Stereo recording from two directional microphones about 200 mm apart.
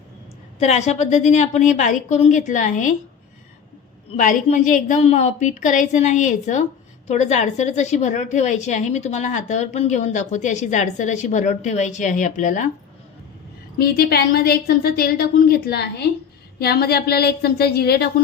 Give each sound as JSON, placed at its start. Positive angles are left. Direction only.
{"t": 0.6, "sound": "a woman's voice", "side_deg": 35}
{"t": 4.2, "sound": "a woman's voice", "side_deg": 40}
{"t": 13.7, "sound": "a woman's voice", "side_deg": 50}